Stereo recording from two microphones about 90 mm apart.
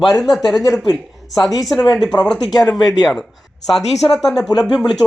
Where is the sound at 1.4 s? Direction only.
40° left (ahead or behind).